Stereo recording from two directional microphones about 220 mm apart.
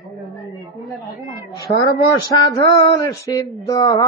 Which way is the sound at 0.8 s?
Centre (ahead or behind).